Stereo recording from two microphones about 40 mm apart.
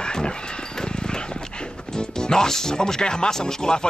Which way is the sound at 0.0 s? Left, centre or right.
Centre.